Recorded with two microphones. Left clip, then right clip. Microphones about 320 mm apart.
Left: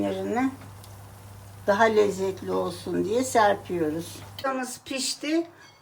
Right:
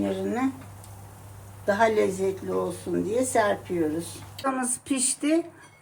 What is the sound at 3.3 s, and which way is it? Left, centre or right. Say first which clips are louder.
Speech: left 3 dB; left.